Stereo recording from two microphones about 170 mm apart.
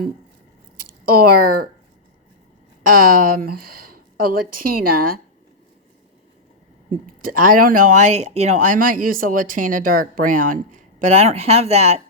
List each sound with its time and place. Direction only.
0.8 s speech: 60° right (ahead or behind)
2.8 s speech: 55° right (ahead or behind)
7.2 s speech: 55° right (ahead or behind); by 12.0 s 40° right (ahead or behind)